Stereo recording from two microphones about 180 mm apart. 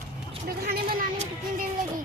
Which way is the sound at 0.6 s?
55° right (ahead or behind).